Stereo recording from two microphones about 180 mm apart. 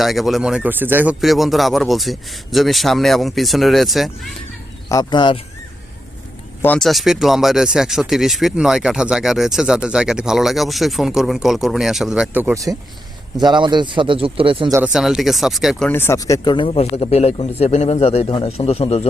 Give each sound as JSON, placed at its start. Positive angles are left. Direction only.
{"t": 0.0, "sound": "speech", "side_deg": 0}
{"t": 4.9, "sound": "speech", "side_deg": 20}
{"t": 6.6, "sound": "speech", "side_deg": 5}
{"t": 13.3, "sound": "a man's voice", "side_deg": -25}
{"t": 14.9, "sound": "speech", "side_deg": 0}
{"t": 15.9, "sound": "speech", "side_deg": 15}